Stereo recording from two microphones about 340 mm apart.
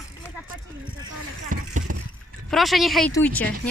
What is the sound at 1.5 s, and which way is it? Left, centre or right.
Vehicle, right.